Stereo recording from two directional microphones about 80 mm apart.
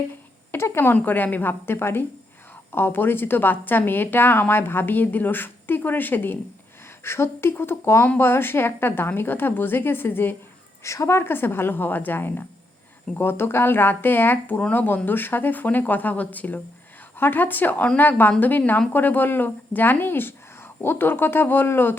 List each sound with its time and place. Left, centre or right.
0.5 s a woman's voice: left
10.8 s a woman's voice: left